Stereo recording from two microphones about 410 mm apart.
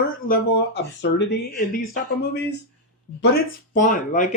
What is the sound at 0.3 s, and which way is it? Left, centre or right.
Speech, left.